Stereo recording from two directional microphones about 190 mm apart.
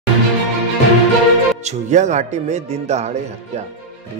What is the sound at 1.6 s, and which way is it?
Speech, 35° right (ahead or behind).